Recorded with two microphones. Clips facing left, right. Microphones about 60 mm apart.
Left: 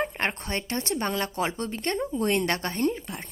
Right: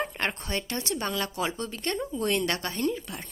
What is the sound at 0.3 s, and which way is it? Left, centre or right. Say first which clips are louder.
Speech: left 1 dB; left.